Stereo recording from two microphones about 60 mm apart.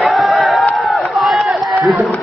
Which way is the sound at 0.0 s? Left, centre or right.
Centre.